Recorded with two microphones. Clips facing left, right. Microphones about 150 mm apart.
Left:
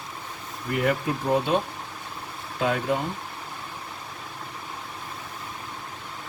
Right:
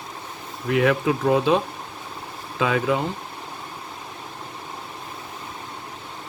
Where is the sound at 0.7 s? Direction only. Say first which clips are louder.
Right 5 dB; 90° right.